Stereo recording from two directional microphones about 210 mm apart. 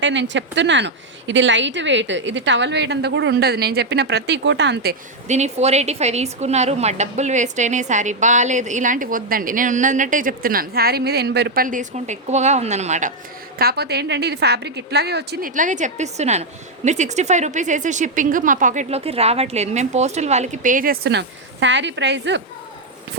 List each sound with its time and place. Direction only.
0.0 s a woman's voice: 60° right (ahead or behind)
5.3 s a woman's voice: 30° right (ahead or behind)
13.6 s a woman's voice: 50° right (ahead or behind)